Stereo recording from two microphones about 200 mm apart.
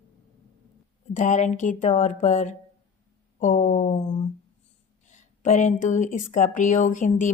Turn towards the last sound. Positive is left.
turn(degrees=40)  # may be behind; listen again after turning